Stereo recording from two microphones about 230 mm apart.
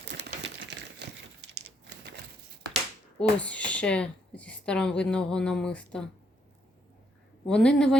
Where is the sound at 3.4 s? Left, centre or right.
Centre.